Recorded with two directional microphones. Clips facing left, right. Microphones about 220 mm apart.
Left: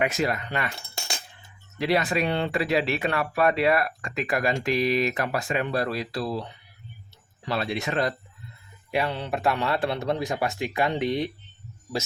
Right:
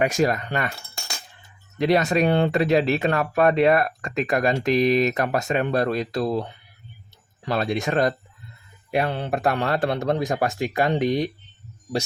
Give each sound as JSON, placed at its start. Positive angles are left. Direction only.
{"t": 0.0, "sound": "speech", "side_deg": -45}
{"t": 0.8, "sound": "cutlery", "side_deg": 25}
{"t": 1.8, "sound": "speech", "side_deg": -45}